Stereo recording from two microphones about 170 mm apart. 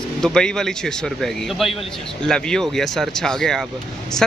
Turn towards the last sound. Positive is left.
turn(degrees=5)  # may be behind; listen again after turning